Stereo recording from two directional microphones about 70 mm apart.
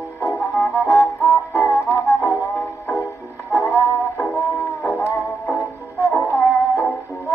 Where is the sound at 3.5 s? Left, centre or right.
Left.